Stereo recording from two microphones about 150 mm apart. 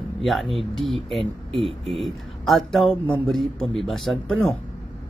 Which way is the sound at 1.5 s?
35° right (ahead or behind).